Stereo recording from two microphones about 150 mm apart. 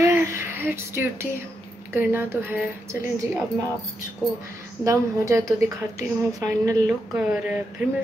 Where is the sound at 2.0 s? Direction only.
15° right (ahead or behind).